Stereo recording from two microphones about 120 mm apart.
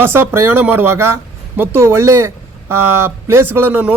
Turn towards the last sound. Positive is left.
turn(degrees=-15)  # may be behind; listen again after turning